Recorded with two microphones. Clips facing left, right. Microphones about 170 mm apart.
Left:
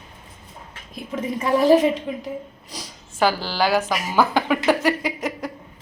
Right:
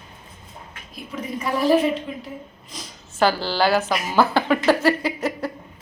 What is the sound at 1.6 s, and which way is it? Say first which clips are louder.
Speech: left 2 dB; 20° left (ahead or behind).